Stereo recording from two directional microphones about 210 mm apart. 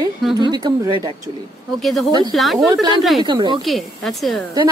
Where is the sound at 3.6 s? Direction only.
Centre (ahead or behind).